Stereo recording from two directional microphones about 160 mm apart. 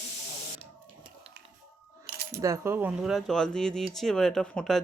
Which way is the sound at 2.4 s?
15° right (ahead or behind).